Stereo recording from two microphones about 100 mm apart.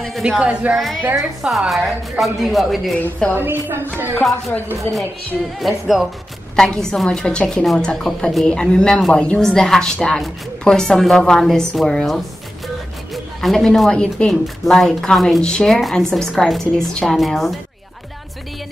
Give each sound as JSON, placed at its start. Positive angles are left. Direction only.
{"t": 0.0, "sound": "a woman's voice", "side_deg": 0}
{"t": 3.0, "sound": "a woman's voice", "side_deg": 15}
{"t": 3.3, "sound": "a woman's voice", "side_deg": -20}
{"t": 4.2, "sound": "speech", "side_deg": 0}
{"t": 5.6, "sound": "a woman's voice", "side_deg": 0}